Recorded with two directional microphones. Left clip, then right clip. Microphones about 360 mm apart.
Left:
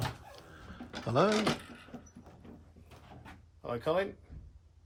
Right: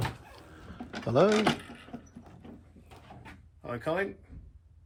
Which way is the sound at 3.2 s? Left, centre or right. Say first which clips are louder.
Even; centre.